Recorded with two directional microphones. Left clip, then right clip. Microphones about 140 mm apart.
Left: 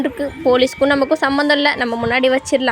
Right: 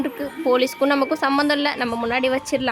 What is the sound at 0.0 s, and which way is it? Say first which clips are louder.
A woman's voice: left 6 dB; 15° left (ahead or behind).